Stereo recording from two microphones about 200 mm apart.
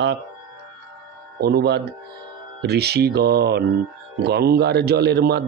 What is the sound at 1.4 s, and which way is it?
A man's voice, 50° right (ahead or behind).